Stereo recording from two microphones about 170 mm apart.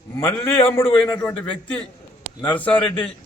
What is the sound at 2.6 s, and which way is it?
Speech, 10° left (ahead or behind).